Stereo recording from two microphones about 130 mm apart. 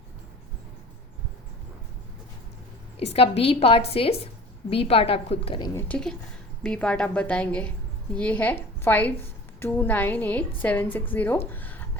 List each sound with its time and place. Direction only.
3.0 s a woman's voice: 55° left (ahead or behind)
5.7 s a woman's voice: 10° left (ahead or behind)